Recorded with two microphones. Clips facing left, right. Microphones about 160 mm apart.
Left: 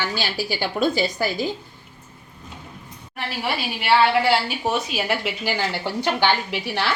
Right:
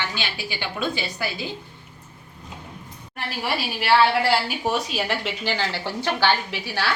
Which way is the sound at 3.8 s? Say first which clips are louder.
Left 1 dB; centre (ahead or behind).